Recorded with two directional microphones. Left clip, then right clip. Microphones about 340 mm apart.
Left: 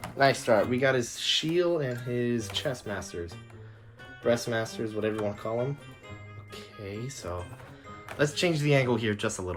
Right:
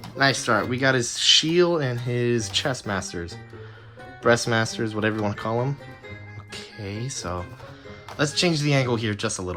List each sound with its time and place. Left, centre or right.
0.2 s speech: centre
4.2 s speech: centre